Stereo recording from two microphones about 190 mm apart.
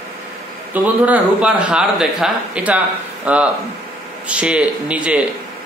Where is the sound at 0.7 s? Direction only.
5° right (ahead or behind).